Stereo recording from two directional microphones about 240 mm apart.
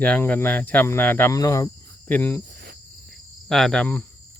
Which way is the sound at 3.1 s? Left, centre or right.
Centre.